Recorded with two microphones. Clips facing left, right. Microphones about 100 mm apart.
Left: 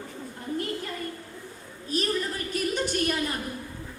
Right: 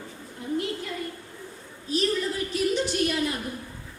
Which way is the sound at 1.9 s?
45° left (ahead or behind).